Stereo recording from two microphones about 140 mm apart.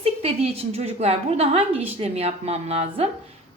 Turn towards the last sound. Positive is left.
turn(degrees=-45)  # may be behind; listen again after turning